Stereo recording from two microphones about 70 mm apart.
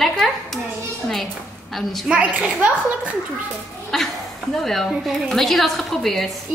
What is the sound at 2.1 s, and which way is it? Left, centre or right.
Speech, centre.